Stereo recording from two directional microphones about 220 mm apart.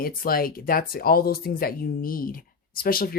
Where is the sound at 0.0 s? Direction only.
40° left (ahead or behind).